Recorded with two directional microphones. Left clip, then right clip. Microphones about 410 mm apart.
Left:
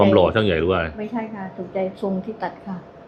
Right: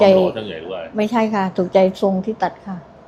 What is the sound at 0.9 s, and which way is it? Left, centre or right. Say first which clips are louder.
A woman's voice: right 11 dB; right.